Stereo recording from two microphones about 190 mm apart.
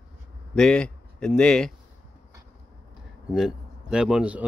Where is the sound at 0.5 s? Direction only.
5° left (ahead or behind).